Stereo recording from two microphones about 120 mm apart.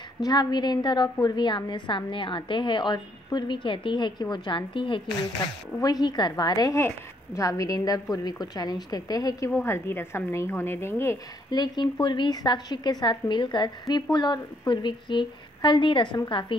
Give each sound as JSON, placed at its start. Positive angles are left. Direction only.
{"t": 0.2, "sound": "a woman's voice", "side_deg": 35}
{"t": 5.8, "sound": "a woman's voice", "side_deg": 35}
{"t": 9.5, "sound": "a woman's voice", "side_deg": 20}
{"t": 11.5, "sound": "a woman's voice", "side_deg": 35}